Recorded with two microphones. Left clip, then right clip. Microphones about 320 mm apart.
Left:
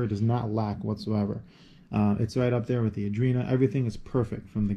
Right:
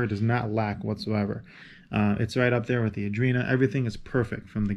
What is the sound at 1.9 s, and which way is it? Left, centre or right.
Speech, centre.